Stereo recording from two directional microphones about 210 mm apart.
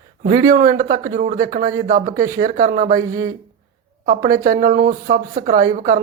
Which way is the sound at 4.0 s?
40° right (ahead or behind).